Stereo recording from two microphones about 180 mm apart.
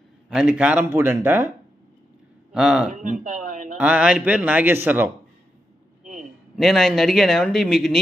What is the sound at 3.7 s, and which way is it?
A man's voice, 5° right (ahead or behind).